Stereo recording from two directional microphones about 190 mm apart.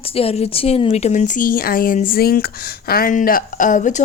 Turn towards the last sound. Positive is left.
turn(degrees=40)  # may be behind; listen again after turning